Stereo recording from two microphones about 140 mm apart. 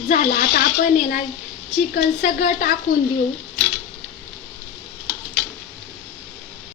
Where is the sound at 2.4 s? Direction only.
80° left.